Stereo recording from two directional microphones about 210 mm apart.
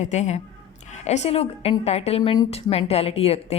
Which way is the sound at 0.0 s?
35° left (ahead or behind).